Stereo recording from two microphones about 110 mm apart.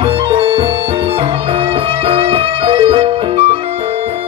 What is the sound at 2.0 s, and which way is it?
Music, 60° right (ahead or behind).